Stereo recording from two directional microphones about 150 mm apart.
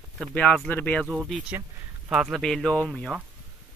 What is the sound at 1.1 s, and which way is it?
Speech, 5° right (ahead or behind).